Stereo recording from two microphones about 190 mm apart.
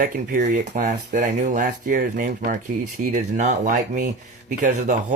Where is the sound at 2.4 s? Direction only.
45° right (ahead or behind).